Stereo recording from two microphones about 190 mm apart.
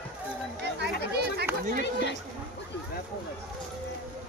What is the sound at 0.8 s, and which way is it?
Chatter, 60° right (ahead or behind).